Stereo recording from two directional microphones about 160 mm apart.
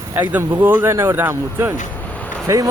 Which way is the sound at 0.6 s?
15° right (ahead or behind).